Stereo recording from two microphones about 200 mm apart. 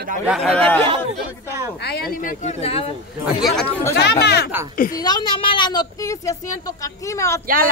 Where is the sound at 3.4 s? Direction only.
5° left (ahead or behind).